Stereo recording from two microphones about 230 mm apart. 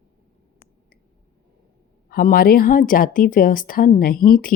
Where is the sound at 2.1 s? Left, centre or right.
Left.